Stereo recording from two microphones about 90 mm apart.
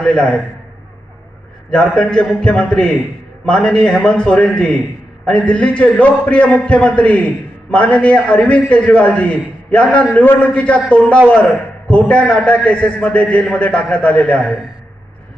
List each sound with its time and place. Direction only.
0.0 s a man's voice: 10° left (ahead or behind)
2.0 s a man's voice: 10° left (ahead or behind)